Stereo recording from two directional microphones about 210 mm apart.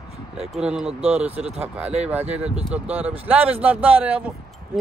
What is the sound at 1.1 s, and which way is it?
Speech, 5° right (ahead or behind).